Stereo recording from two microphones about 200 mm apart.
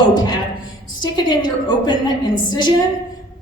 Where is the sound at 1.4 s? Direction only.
20° left (ahead or behind).